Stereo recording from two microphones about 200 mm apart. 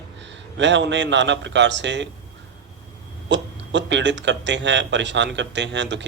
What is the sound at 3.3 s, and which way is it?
Speech, 65° right (ahead or behind).